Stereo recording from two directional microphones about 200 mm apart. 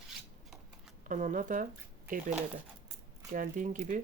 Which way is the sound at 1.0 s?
40° right (ahead or behind).